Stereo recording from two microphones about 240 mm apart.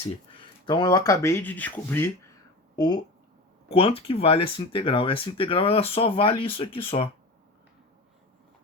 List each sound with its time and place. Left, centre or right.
0.6 s speech: centre